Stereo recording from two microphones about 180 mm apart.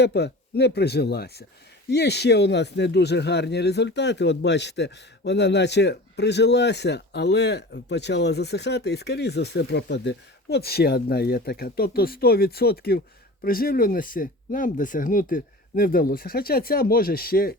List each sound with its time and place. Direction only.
0.0 s speech: 65° left (ahead or behind)